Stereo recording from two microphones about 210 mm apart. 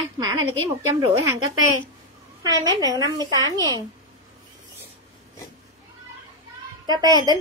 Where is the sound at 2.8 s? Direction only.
20° right (ahead or behind).